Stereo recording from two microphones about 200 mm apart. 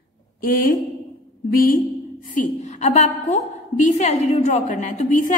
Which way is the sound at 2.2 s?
35° left (ahead or behind).